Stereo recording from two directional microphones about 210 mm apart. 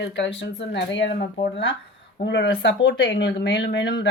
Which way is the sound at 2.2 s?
55° left (ahead or behind).